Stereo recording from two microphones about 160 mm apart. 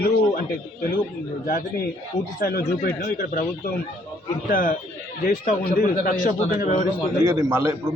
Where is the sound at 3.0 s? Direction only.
55° left (ahead or behind).